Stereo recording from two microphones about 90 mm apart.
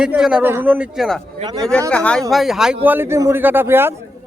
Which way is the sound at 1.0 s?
Centre (ahead or behind).